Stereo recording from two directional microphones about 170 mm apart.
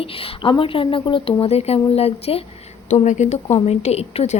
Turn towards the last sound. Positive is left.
turn(degrees=40)  # may be behind; listen again after turning